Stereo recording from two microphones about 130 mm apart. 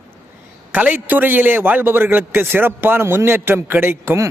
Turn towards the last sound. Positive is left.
turn(degrees=-15)  # may be behind; listen again after turning